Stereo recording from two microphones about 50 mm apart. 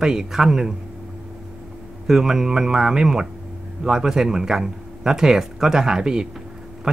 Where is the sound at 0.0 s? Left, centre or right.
Centre.